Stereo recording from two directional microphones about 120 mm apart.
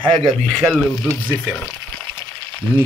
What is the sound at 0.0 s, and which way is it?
Speech, 45° right (ahead or behind).